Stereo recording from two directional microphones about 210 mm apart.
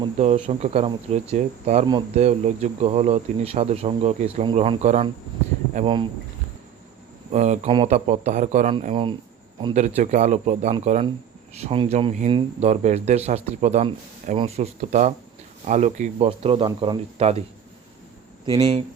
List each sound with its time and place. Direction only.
0.0 s speech: 30° right (ahead or behind)
7.3 s speech: 35° right (ahead or behind)
18.4 s speech: 25° right (ahead or behind)